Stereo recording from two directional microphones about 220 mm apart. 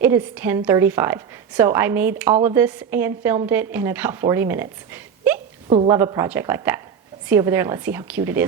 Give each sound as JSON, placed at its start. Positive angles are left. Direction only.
{"t": 0.0, "sound": "a woman's voice", "side_deg": -10}
{"t": 5.6, "sound": "a woman's voice", "side_deg": -25}
{"t": 5.9, "sound": "a woman's voice", "side_deg": -15}